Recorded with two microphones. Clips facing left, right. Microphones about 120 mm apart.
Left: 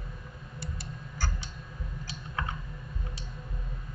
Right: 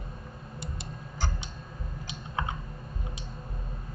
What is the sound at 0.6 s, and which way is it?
Tick, 20° right (ahead or behind).